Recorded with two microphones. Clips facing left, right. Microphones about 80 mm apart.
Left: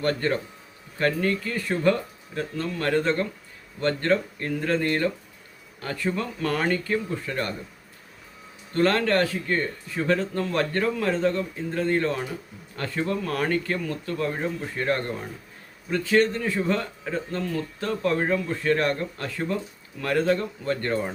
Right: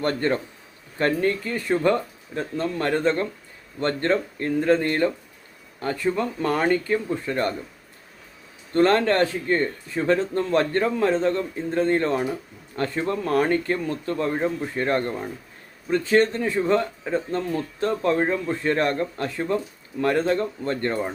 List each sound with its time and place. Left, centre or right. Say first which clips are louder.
0.0 s speech: right 2 dB; right
8.7 s speech: right 3 dB; right